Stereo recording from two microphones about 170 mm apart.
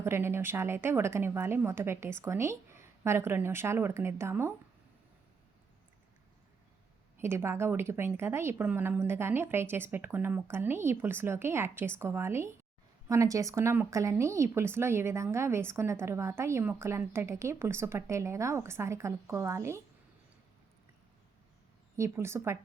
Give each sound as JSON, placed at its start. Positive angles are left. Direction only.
{"t": 0.0, "sound": "speech", "side_deg": -15}
{"t": 7.2, "sound": "speech", "side_deg": -15}
{"t": 21.9, "sound": "speech", "side_deg": -15}